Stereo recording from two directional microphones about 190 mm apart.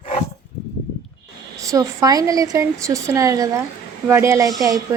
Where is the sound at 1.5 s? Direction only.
15° right (ahead or behind).